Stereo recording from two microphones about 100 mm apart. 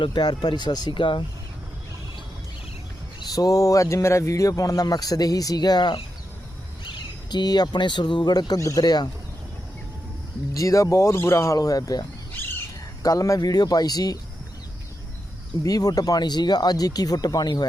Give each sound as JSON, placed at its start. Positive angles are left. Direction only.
{"t": 0.0, "sound": "speech", "side_deg": 50}
{"t": 3.2, "sound": "a man's voice", "side_deg": 35}
{"t": 7.3, "sound": "speech", "side_deg": 45}
{"t": 10.5, "sound": "a man's voice", "side_deg": 35}
{"t": 12.3, "sound": "bird", "side_deg": 20}
{"t": 13.0, "sound": "a man's voice", "side_deg": 35}
{"t": 15.6, "sound": "a man's voice", "side_deg": 40}